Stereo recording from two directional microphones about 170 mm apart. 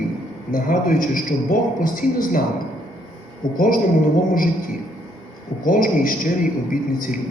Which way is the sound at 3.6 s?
55° left (ahead or behind).